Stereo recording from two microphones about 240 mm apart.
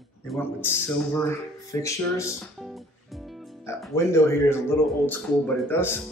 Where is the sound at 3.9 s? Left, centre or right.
Centre.